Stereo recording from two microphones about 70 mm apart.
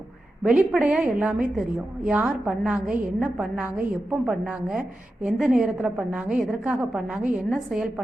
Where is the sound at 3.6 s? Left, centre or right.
Right.